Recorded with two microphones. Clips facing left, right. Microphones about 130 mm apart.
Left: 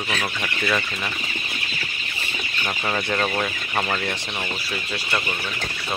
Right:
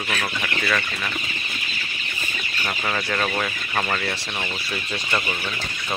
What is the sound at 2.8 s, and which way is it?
Speech, 15° left (ahead or behind).